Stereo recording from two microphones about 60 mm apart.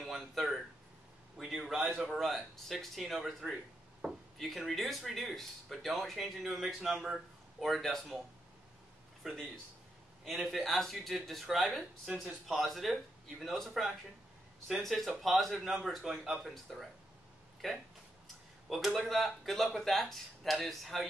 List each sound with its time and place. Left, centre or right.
0.0 s speech: centre
9.2 s speech: centre
12.1 s speech: centre
12.4 s speech: centre